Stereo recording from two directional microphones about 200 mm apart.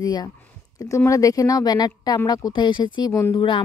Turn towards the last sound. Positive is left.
turn(degrees=25)  # may be behind; listen again after turning